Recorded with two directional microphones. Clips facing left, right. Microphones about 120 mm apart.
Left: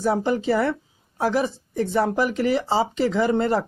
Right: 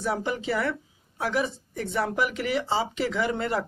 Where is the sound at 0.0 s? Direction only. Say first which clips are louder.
Left 7 dB; 35° left (ahead or behind).